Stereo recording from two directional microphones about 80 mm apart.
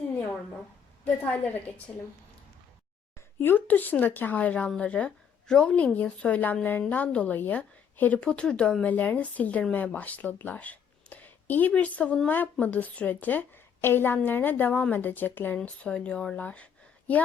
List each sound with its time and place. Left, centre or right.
1.2 s a woman's voice: left
3.2 s a woman's voice: left